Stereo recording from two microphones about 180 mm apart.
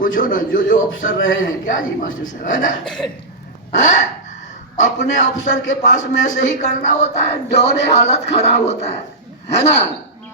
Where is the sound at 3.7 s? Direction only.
45° left (ahead or behind).